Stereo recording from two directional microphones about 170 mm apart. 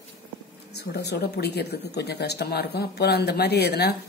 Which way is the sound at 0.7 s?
75° left (ahead or behind).